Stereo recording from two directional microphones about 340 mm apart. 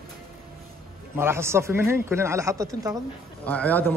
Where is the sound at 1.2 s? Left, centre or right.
Centre.